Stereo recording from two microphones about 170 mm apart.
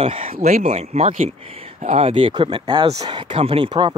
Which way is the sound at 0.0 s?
35° right (ahead or behind).